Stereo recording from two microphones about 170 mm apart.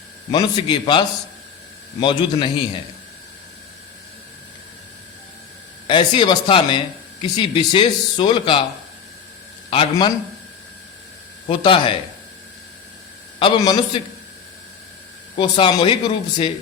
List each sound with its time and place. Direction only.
0.3 s speech: 25° left (ahead or behind)
5.9 s speech: 25° left (ahead or behind)
9.6 s a man's voice: 35° left (ahead or behind)
11.4 s speech: 30° left (ahead or behind)
13.4 s speech: 25° left (ahead or behind)
15.4 s speech: 30° left (ahead or behind)